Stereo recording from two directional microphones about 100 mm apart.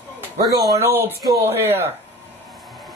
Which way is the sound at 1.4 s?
25° right (ahead or behind).